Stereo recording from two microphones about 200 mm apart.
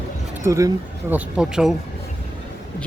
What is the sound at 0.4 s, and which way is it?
Speech, 15° right (ahead or behind).